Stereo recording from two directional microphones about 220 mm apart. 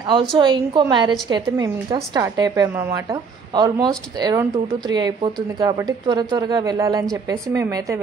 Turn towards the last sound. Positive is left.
turn(degrees=-15)  # may be behind; listen again after turning